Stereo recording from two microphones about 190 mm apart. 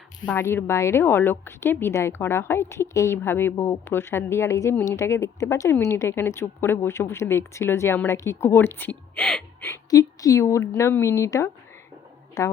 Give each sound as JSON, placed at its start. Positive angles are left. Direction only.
{"t": 0.3, "sound": "speech", "side_deg": 10}